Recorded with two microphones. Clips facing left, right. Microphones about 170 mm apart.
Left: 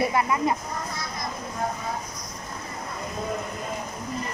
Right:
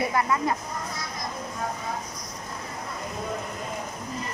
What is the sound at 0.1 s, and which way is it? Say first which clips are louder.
Speech: left 1 dB; 20° left (ahead or behind).